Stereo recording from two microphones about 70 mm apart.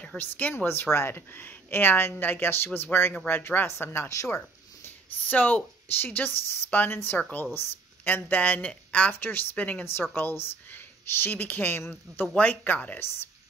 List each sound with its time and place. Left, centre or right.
0.2 s a woman's voice: left
3.6 s speech: left
4.8 s speech: left
9.1 s speech: left